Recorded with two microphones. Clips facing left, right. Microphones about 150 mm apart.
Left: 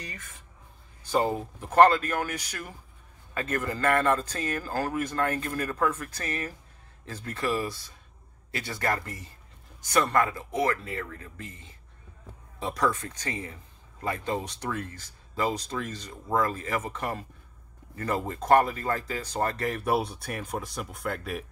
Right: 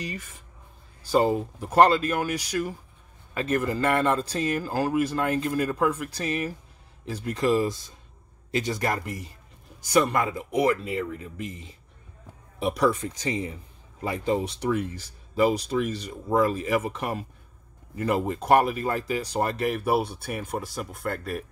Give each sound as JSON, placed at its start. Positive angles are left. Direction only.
{"t": 1.2, "sound": "a man's voice", "side_deg": -10}